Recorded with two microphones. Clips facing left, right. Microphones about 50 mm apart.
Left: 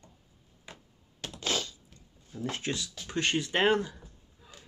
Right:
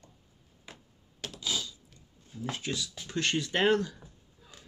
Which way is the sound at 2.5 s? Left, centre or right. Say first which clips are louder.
Even; left.